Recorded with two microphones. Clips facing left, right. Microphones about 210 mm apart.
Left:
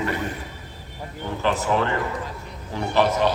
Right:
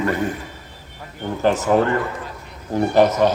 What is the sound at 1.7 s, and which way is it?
Speech, 45° right (ahead or behind).